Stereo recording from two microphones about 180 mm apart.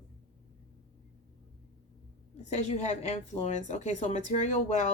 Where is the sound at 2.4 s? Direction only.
40° left (ahead or behind).